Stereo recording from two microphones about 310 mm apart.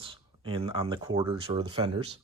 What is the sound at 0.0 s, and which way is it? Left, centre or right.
Speech, centre.